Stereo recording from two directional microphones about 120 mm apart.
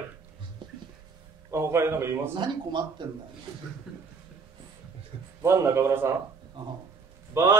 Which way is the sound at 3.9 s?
5° right (ahead or behind).